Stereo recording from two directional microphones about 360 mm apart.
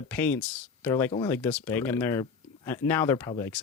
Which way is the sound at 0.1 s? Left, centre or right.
Centre.